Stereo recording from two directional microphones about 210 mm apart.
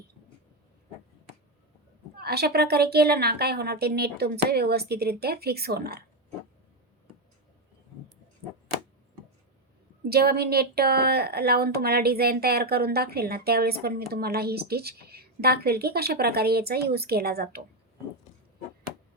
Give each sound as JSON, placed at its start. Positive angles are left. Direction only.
{"t": 2.1, "sound": "a woman's voice", "side_deg": -50}
{"t": 10.1, "sound": "a woman's voice", "side_deg": -50}